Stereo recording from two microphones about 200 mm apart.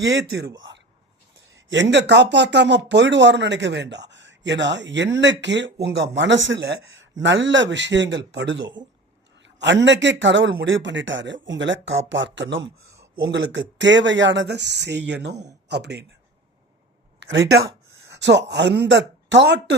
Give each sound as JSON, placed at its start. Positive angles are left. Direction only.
{"t": 0.0, "sound": "speech", "side_deg": -60}
{"t": 8.6, "sound": "speech", "side_deg": -20}
{"t": 9.4, "sound": "speech", "side_deg": -60}
{"t": 17.2, "sound": "speech", "side_deg": -60}